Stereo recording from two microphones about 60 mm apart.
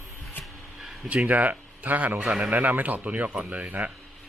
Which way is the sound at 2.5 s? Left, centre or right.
Right.